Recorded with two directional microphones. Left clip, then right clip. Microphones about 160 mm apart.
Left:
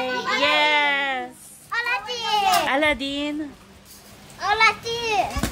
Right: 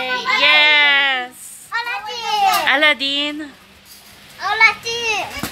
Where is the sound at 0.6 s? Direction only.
10° left (ahead or behind).